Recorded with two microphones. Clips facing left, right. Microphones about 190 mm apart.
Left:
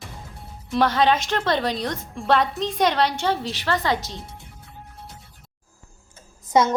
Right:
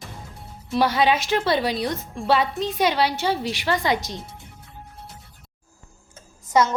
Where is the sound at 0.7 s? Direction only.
10° right (ahead or behind).